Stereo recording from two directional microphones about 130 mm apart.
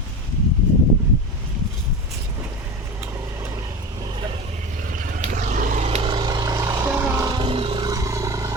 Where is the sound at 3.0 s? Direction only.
20° right (ahead or behind).